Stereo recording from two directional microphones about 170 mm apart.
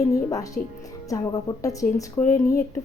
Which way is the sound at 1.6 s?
20° left (ahead or behind).